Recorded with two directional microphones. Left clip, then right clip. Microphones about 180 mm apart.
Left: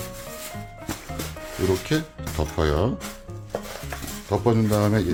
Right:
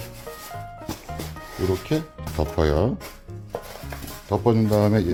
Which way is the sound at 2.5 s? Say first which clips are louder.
Right 2 dB; 25° right (ahead or behind).